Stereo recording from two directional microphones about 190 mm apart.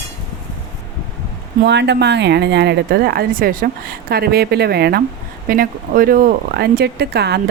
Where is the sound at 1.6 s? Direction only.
65° right (ahead or behind).